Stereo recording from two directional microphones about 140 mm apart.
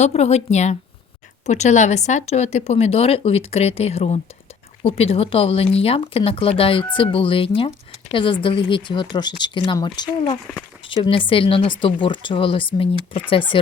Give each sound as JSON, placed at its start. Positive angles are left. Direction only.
{"t": 0.0, "sound": "speech", "side_deg": 50}